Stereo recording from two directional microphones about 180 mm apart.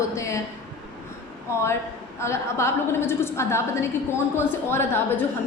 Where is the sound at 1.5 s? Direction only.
15° left (ahead or behind).